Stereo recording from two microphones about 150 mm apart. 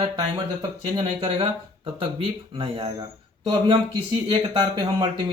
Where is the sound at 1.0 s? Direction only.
35° right (ahead or behind).